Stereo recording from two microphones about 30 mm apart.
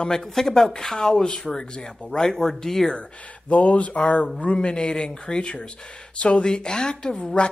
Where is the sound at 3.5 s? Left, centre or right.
Left.